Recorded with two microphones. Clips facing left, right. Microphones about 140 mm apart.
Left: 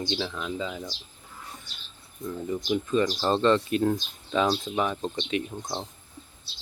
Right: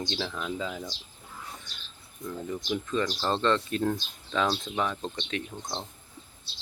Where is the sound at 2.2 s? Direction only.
25° left (ahead or behind).